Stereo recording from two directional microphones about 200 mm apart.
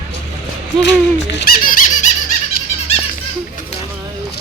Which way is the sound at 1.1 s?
60° left (ahead or behind).